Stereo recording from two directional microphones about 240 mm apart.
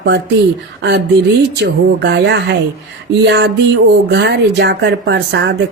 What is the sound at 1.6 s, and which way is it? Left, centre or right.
Speech, right.